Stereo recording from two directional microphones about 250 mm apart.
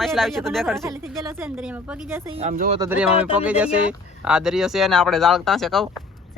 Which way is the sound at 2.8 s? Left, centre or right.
Centre.